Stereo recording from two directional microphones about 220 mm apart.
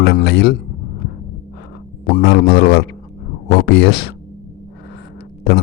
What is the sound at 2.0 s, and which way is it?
A man's voice, 45° left (ahead or behind).